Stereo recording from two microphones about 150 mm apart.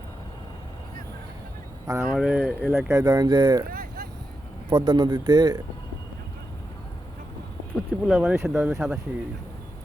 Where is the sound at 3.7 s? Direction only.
80° right.